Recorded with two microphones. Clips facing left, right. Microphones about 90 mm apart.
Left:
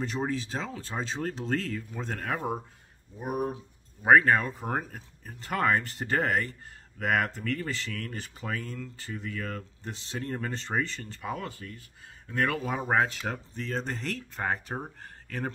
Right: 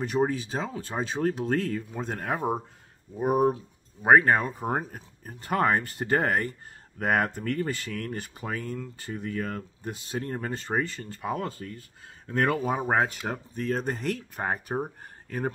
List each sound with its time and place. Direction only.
0.0 s speech: 15° right (ahead or behind)
3.2 s speech: 35° right (ahead or behind)
4.0 s speech: 25° right (ahead or behind)
5.5 s speech: 25° right (ahead or behind)
6.2 s speech: 45° right (ahead or behind)
7.0 s speech: 30° right (ahead or behind); by 11.3 s 10° right (ahead or behind)
11.3 s speech: 35° right (ahead or behind)
12.5 s speech: 15° right (ahead or behind)